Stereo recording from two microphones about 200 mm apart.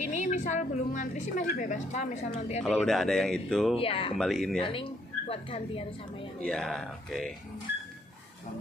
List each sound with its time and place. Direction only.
0.0 s a woman's voice: 35° left (ahead or behind)
2.6 s speech: 5° left (ahead or behind)
3.7 s a woman's voice: 30° left (ahead or behind)
4.2 s speech: centre (ahead or behind)
4.6 s a woman's voice: 25° left (ahead or behind)
6.4 s speech: 5° left (ahead or behind)